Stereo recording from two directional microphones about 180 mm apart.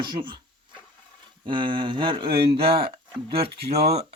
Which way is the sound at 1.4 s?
25° right (ahead or behind).